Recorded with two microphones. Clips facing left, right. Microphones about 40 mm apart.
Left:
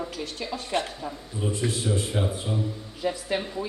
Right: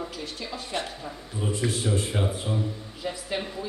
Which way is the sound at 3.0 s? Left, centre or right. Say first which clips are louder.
Left 5 dB; centre.